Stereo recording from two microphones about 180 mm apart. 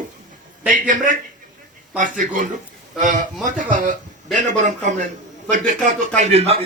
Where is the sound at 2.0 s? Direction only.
45° right (ahead or behind).